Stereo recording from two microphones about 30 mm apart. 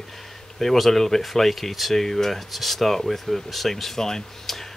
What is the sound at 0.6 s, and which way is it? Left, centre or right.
Speech, centre.